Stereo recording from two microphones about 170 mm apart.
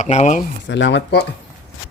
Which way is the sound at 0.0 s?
45° left (ahead or behind).